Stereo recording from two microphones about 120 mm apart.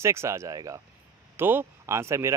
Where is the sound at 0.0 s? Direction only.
25° right (ahead or behind).